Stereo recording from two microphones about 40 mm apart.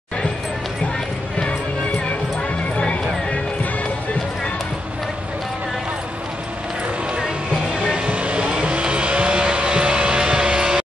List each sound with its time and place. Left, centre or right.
7.9 s vehicle: right